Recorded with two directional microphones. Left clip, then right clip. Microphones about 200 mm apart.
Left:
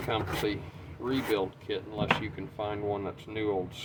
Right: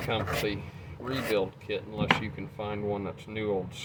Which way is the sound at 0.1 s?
25° left (ahead or behind).